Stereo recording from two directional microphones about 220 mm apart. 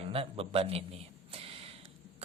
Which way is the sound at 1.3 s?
25° right (ahead or behind).